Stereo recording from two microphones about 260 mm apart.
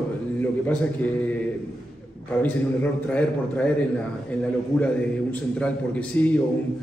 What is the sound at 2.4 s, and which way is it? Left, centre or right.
A man's voice, centre.